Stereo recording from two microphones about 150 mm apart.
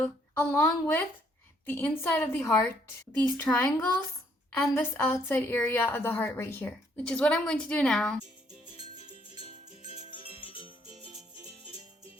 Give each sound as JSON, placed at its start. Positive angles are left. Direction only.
{"t": 0.0, "sound": "a woman's voice", "side_deg": 15}
{"t": 9.4, "sound": "music", "side_deg": 40}